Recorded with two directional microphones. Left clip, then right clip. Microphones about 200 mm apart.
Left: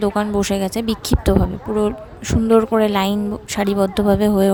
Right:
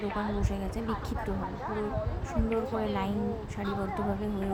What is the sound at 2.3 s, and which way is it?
A woman's voice, 55° left (ahead or behind).